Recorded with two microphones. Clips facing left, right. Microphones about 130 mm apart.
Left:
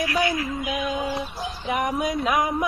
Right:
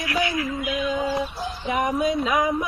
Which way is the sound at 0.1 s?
40° left (ahead or behind).